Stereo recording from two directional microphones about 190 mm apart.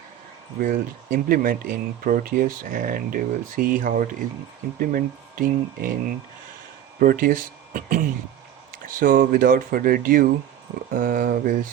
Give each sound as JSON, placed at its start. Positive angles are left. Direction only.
{"t": 0.6, "sound": "speech", "side_deg": -45}
{"t": 7.0, "sound": "speech", "side_deg": -50}